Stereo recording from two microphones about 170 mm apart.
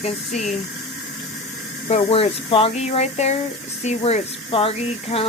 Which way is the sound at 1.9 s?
40° left (ahead or behind).